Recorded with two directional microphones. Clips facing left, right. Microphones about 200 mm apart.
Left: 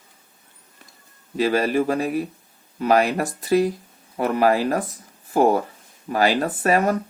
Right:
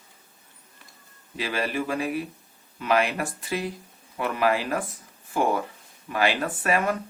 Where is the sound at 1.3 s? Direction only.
40° left (ahead or behind).